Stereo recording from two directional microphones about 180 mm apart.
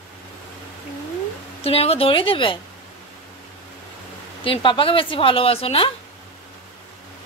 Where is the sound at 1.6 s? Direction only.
35° left (ahead or behind).